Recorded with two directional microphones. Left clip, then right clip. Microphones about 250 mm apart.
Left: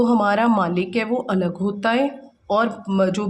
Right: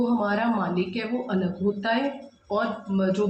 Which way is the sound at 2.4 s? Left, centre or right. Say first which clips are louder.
Left 7 dB; left.